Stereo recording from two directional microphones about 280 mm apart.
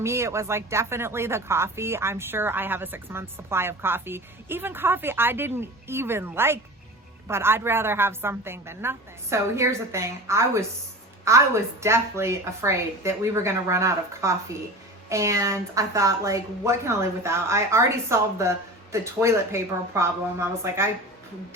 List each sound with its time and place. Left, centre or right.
0.0 s speech: centre